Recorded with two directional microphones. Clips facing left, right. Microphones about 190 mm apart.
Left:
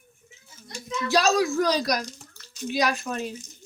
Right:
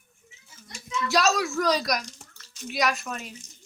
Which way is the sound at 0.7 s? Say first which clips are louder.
Left 2 dB; 35° left (ahead or behind).